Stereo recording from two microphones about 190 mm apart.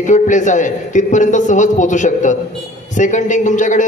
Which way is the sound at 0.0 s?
40° left (ahead or behind).